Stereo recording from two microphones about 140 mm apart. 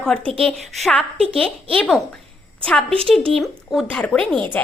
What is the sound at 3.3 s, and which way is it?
A woman's voice, centre (ahead or behind).